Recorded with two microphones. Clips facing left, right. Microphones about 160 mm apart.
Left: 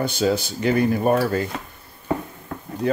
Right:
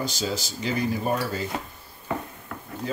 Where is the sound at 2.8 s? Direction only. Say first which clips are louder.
Left 9 dB; 65° left (ahead or behind).